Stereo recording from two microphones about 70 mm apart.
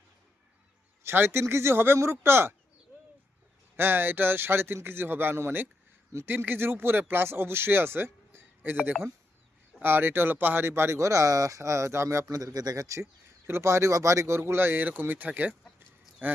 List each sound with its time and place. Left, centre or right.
1.0 s a man's voice: right
3.8 s a man's voice: right
9.8 s a man's voice: right